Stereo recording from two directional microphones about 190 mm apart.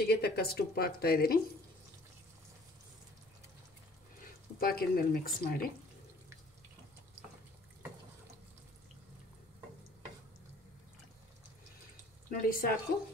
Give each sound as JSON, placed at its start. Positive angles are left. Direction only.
{"t": 0.0, "sound": "speech", "side_deg": 55}
{"t": 4.6, "sound": "speech", "side_deg": 50}
{"t": 12.3, "sound": "speech", "side_deg": 50}